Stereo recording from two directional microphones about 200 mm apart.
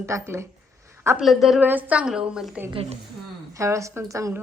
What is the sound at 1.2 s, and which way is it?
A woman's voice, centre (ahead or behind).